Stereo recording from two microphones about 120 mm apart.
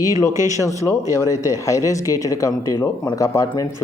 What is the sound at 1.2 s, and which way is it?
Speech, 30° left (ahead or behind).